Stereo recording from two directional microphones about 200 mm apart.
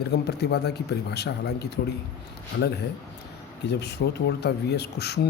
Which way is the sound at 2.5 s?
55° left (ahead or behind).